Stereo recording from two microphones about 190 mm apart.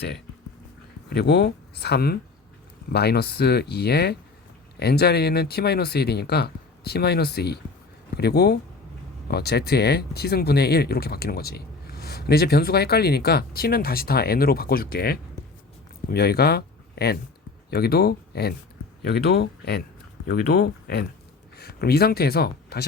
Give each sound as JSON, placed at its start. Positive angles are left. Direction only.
{"t": 1.1, "sound": "speech", "side_deg": 60}